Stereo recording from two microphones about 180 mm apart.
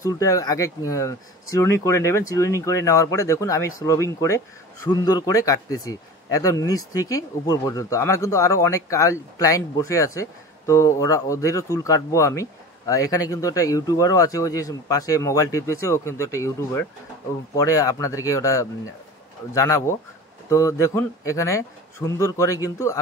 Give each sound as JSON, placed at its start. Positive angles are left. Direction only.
{"t": 0.0, "sound": "speech", "side_deg": 20}